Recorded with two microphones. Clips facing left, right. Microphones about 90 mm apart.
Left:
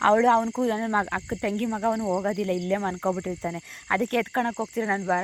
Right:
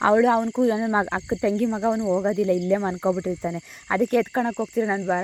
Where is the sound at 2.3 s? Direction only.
20° right (ahead or behind).